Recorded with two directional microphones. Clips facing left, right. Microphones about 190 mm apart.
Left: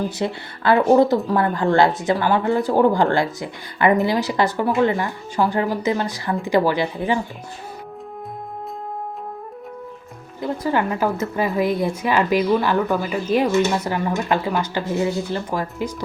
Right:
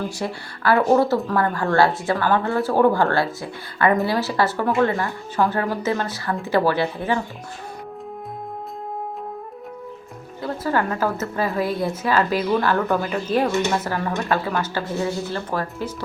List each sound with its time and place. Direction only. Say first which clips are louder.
0.2 s a woman's voice: left 3 dB; 20° left (ahead or behind)
10.4 s a woman's voice: left 2 dB; 15° left (ahead or behind)